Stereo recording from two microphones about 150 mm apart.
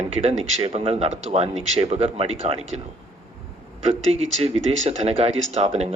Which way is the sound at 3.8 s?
45° right (ahead or behind).